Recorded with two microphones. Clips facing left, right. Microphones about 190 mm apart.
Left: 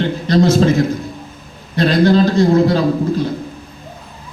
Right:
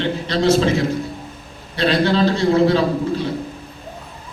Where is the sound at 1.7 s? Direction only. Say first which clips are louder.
Left 5 dB; 40° left (ahead or behind).